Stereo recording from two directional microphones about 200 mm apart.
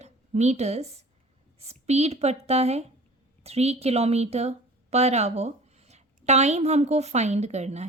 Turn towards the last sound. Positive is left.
turn(degrees=-35)  # may be behind; listen again after turning